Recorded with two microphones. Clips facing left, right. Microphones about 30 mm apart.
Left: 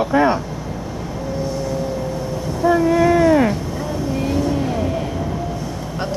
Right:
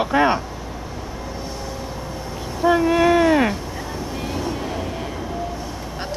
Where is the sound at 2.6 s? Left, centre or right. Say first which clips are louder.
Left 1 dB; right.